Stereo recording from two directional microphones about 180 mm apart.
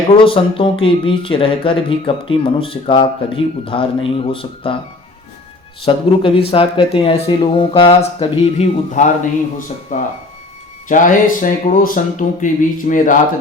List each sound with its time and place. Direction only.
0.3 s speech: 30° left (ahead or behind)
5.8 s speech: 30° left (ahead or behind)
9.6 s speech: 45° left (ahead or behind)